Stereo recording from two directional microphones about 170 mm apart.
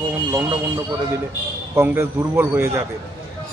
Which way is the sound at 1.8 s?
15° right (ahead or behind).